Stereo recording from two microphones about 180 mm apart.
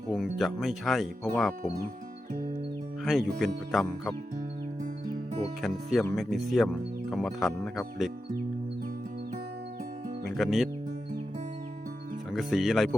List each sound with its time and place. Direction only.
0.1 s speech: centre (ahead or behind)
3.0 s speech: centre (ahead or behind)
5.6 s speech: centre (ahead or behind)
10.2 s speech: centre (ahead or behind)
12.3 s speech: centre (ahead or behind)